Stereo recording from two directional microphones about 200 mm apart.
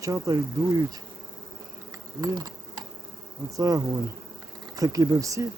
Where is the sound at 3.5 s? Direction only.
15° right (ahead or behind).